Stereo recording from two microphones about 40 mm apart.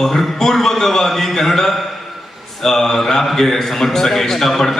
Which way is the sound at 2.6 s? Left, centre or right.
Centre.